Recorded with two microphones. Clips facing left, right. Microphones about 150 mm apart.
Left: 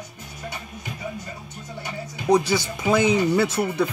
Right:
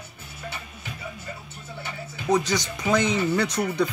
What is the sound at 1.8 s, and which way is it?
Speech, 10° left (ahead or behind).